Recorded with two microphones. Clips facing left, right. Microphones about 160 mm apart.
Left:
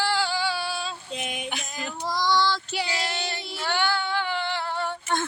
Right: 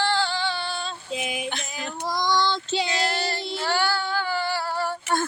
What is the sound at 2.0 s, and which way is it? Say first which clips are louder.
Child singing: even; 15° right (ahead or behind).